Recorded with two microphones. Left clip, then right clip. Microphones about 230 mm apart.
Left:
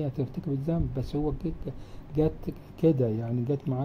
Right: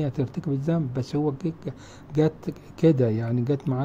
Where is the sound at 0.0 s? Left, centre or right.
Right.